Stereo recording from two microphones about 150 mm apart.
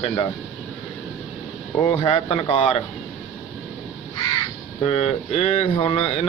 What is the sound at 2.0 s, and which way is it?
Speech, 35° left (ahead or behind).